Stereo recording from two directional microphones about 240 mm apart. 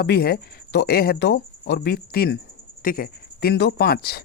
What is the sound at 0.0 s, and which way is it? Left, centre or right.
Speech, left.